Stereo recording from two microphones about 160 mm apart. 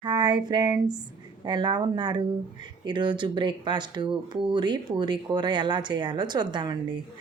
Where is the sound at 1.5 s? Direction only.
30° right (ahead or behind).